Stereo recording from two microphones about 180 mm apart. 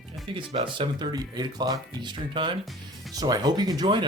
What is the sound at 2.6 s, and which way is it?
Music, centre (ahead or behind).